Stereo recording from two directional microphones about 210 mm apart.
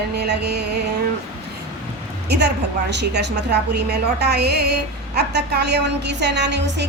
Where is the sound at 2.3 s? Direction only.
50° right (ahead or behind).